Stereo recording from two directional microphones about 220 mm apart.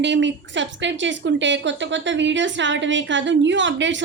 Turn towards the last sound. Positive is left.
turn(degrees=-55)  # may be behind; listen again after turning